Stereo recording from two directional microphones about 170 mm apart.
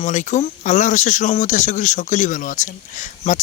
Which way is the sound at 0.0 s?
45° left (ahead or behind).